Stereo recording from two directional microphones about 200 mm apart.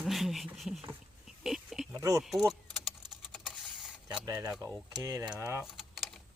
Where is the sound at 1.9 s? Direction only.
15° right (ahead or behind).